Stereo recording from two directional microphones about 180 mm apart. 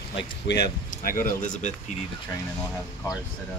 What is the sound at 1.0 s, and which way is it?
Speech, 50° left (ahead or behind).